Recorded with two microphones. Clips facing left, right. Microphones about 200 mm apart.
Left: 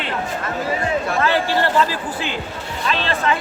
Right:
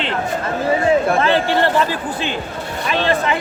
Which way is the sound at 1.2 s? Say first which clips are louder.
Right 3 dB; 20° right (ahead or behind).